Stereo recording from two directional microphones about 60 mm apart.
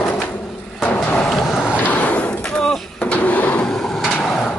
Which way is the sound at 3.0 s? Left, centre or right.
Left.